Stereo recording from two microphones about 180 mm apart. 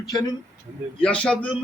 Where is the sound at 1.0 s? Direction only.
5° left (ahead or behind).